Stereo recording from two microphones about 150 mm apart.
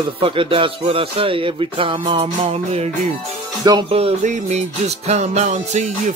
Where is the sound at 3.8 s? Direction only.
40° right (ahead or behind).